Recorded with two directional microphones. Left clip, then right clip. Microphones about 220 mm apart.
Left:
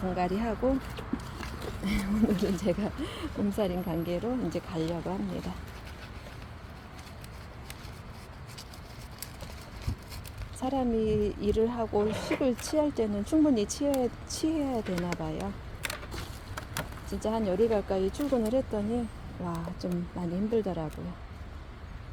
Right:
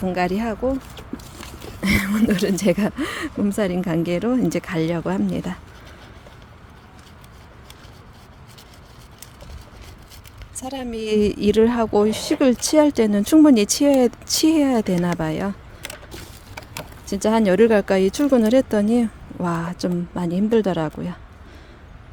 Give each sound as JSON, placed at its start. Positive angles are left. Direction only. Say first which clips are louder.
{"t": 0.1, "sound": "speech", "louder": "right 8 dB", "side_deg": -30}
{"t": 0.9, "sound": "speech", "louder": "right 2 dB", "side_deg": -35}
{"t": 10.6, "sound": "speech", "louder": "right 1 dB", "side_deg": -35}
{"t": 17.1, "sound": "speech", "louder": "right 13 dB", "side_deg": -40}